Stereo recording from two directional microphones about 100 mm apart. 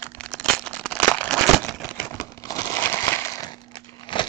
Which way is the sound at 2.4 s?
25° left (ahead or behind).